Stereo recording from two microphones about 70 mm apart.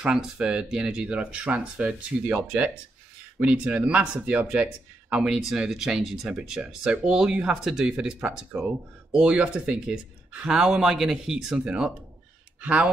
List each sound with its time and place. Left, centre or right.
0.0 s speech: centre
5.2 s speech: centre